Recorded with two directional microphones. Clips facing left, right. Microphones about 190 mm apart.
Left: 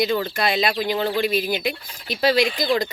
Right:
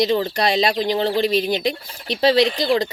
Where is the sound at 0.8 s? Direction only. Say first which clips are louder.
Right 3 dB; 30° right (ahead or behind).